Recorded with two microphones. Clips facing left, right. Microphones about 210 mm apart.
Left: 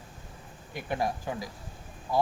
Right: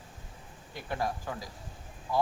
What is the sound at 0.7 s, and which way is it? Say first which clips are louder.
Speech: left 3 dB; 15° left (ahead or behind).